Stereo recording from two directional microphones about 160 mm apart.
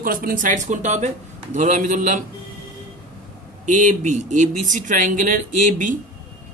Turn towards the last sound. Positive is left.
turn(degrees=-55)  # may be behind; listen again after turning